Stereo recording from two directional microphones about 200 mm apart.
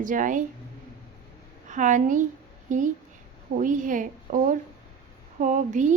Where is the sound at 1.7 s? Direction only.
40° right (ahead or behind).